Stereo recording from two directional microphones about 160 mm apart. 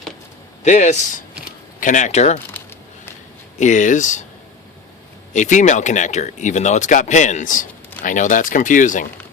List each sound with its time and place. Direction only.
0.6 s speech: 45° left (ahead or behind)
3.6 s speech: 50° left (ahead or behind)
5.3 s speech: 50° left (ahead or behind)